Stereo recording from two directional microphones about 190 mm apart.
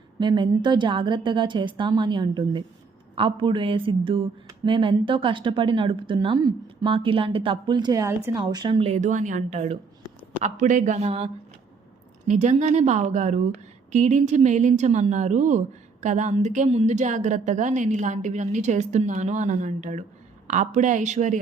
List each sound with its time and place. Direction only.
0.2 s a woman's voice: 25° right (ahead or behind)
12.3 s a woman's voice: 35° right (ahead or behind)